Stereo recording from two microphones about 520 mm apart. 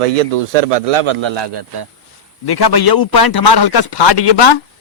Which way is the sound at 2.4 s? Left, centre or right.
Left.